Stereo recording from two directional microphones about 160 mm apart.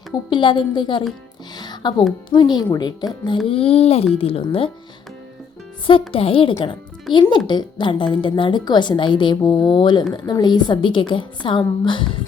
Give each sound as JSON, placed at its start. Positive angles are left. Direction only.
{"t": 0.3, "sound": "speech", "side_deg": 30}
{"t": 1.5, "sound": "music", "side_deg": 25}
{"t": 2.3, "sound": "speech", "side_deg": 25}
{"t": 3.4, "sound": "speech", "side_deg": 35}
{"t": 5.8, "sound": "speech", "side_deg": 35}